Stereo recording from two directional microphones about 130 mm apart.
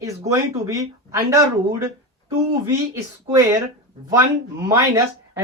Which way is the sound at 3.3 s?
25° right (ahead or behind).